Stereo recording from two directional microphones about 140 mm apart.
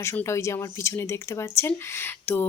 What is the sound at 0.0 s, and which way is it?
Speech, 20° left (ahead or behind).